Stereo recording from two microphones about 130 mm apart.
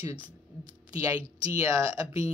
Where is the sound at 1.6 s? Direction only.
25° right (ahead or behind).